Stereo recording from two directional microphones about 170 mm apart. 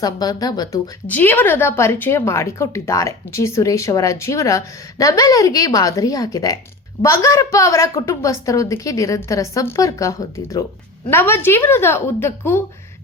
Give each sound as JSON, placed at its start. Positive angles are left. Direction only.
{"t": 0.0, "sound": "a woman's voice", "side_deg": 20}
{"t": 1.0, "sound": "a woman's voice", "side_deg": 10}